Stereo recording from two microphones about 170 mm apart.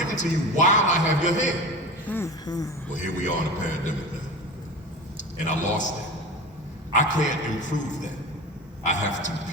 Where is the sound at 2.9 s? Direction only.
45° left (ahead or behind).